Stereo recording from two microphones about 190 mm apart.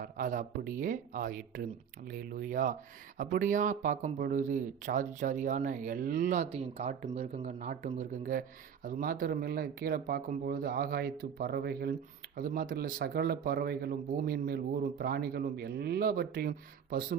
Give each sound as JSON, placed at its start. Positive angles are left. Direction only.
{"t": 0.0, "sound": "speech", "side_deg": -45}